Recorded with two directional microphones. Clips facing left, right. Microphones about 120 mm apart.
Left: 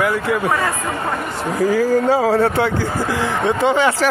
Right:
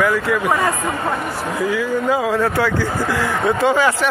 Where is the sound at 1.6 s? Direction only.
40° left (ahead or behind).